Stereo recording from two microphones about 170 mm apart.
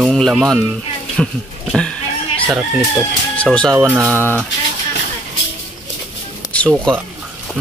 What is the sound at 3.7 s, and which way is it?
Speech, 15° right (ahead or behind).